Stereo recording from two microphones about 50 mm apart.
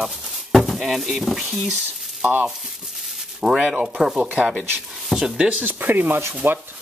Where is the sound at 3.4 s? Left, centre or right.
Centre.